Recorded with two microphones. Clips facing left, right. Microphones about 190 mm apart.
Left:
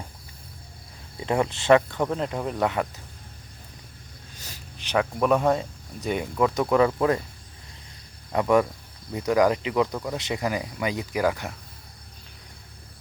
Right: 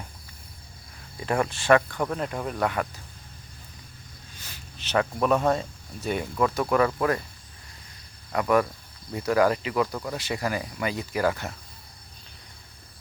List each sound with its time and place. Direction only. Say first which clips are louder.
1.2 s speech: left 2 dB; 20° left (ahead or behind)
4.4 s a sound: left 3 dB; 40° left (ahead or behind)
4.8 s speech: left 1 dB; 10° left (ahead or behind)
8.3 s speech: left 2 dB; 20° left (ahead or behind)